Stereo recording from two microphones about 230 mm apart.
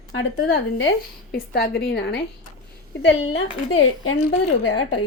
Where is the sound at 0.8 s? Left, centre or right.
Left.